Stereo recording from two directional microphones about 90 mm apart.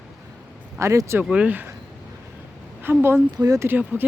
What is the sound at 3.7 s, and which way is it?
Female singing, 20° right (ahead or behind).